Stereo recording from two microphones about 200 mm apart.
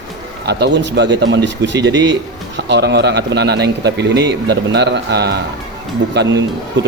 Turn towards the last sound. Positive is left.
turn(degrees=-65)  # may be behind; listen again after turning